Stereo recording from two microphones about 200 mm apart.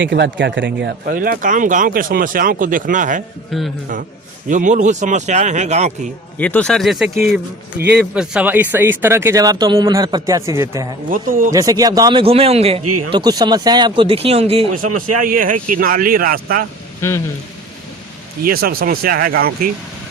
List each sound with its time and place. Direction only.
0.0 s speech: 60° right (ahead or behind); by 3.2 s 40° right (ahead or behind)
3.5 s speech: centre (ahead or behind)
4.4 s speech: 40° right (ahead or behind)
6.4 s speech: 5° left (ahead or behind); by 10.8 s 15° right (ahead or behind)
11.1 s speech: 45° right (ahead or behind)
11.5 s a man's voice: 15° right (ahead or behind)
14.8 s speech: 45° right (ahead or behind)
18.4 s speech: 50° right (ahead or behind)